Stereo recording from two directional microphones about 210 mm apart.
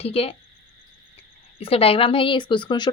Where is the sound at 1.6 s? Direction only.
25° left (ahead or behind).